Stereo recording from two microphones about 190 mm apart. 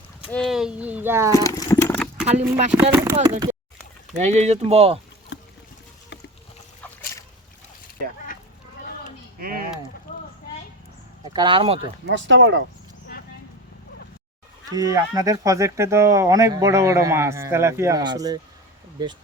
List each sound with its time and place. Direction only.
0.3 s speech: centre (ahead or behind)
1.5 s livestock: 15° left (ahead or behind)
1.9 s a sound: 5° left (ahead or behind)
2.2 s speech: 35° right (ahead or behind)
2.9 s speech: 15° right (ahead or behind)
4.2 s speech: 40° right (ahead or behind)
5.3 s boat: 65° left (ahead or behind)
8.0 s a sound: 50° right (ahead or behind)
9.4 s a sound: 50° right (ahead or behind)
11.3 s speech: 25° right (ahead or behind)
12.0 s speech: 70° right (ahead or behind)
14.7 s speech: 20° right (ahead or behind)